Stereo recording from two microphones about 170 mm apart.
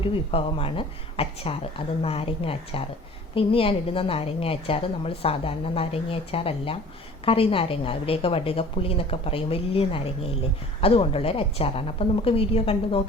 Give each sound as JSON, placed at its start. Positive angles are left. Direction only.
{"t": 0.0, "sound": "a woman's voice", "side_deg": 30}